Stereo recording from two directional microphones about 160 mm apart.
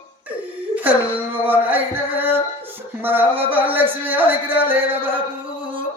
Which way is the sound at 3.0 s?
10° right (ahead or behind).